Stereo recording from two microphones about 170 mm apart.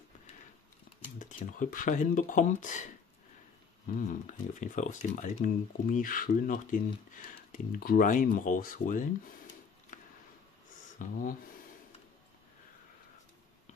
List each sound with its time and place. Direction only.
1.2 s speech: 50° left (ahead or behind)
3.9 s speech: 50° left (ahead or behind)
11.0 s speech: 55° left (ahead or behind)